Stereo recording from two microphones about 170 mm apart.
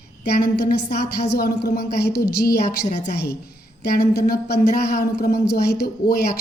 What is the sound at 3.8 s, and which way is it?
A woman's voice, 60° left (ahead or behind).